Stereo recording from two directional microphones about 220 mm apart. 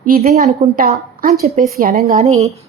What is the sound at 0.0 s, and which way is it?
Speech, 40° right (ahead or behind).